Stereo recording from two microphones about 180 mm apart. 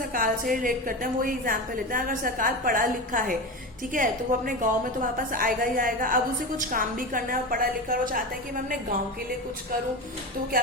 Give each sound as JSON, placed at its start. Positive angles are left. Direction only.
{"t": 0.1, "sound": "a woman's voice", "side_deg": -50}